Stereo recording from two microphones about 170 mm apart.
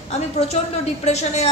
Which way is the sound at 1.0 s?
40° left (ahead or behind).